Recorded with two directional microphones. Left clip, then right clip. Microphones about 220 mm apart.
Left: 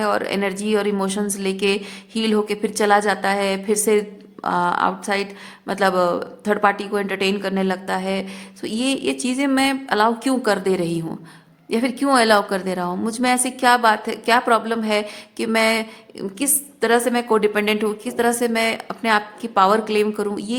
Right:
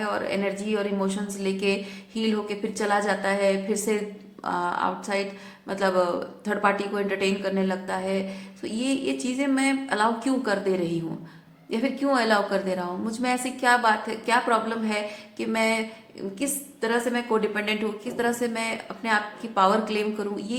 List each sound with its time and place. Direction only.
0.0 s a woman's voice: 45° left (ahead or behind)